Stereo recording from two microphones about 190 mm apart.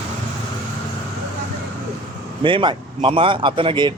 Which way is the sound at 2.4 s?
25° right (ahead or behind).